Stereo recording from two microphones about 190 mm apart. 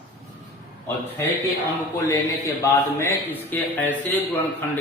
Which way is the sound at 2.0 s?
20° left (ahead or behind).